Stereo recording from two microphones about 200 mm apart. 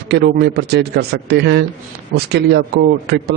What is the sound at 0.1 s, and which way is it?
A man's voice, 55° right (ahead or behind).